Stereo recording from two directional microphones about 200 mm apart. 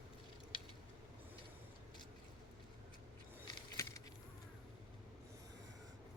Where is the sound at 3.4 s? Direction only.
15° left (ahead or behind).